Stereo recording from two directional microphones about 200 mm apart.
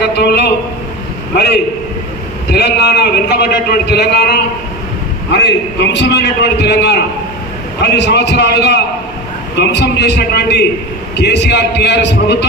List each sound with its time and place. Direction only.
0.0 s a man's voice: 55° left (ahead or behind)
2.5 s a man's voice: 55° left (ahead or behind)